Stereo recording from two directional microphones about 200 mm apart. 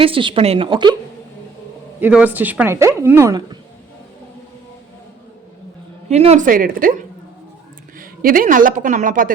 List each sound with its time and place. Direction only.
0.0 s a woman's voice: 25° right (ahead or behind)
2.0 s speech: 10° right (ahead or behind)
6.1 s a woman's voice: 30° right (ahead or behind)
7.9 s a man's voice: 45° right (ahead or behind)